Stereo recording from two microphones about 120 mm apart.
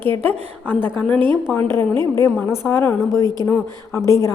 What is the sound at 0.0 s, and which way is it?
A woman's voice, 15° left (ahead or behind).